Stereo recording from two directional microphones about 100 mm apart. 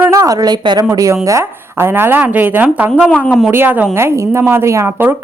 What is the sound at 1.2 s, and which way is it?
Speech, 30° right (ahead or behind).